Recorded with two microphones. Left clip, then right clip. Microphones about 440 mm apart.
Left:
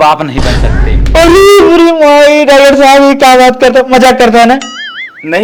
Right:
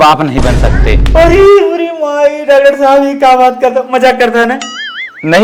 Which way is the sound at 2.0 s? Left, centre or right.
Left.